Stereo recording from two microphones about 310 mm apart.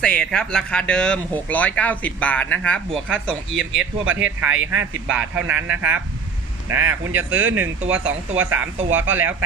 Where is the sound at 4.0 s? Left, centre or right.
Right.